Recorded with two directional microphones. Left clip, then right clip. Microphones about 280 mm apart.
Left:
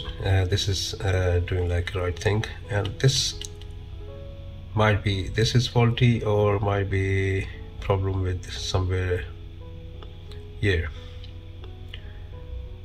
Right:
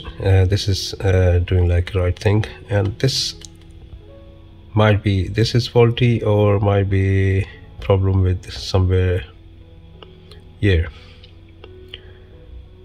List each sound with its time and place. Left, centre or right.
0.2 s speech: right
4.7 s speech: right
10.6 s speech: right